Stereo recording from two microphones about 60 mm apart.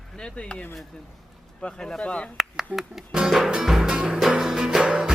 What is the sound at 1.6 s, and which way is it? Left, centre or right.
Speech, centre.